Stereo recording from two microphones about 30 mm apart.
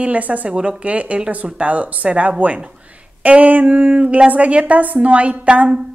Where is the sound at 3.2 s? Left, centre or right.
Right.